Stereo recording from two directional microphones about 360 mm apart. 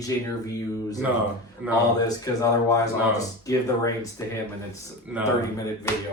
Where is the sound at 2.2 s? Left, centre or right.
Centre.